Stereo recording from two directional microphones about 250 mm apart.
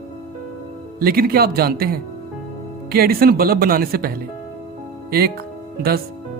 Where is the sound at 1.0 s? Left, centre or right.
Right.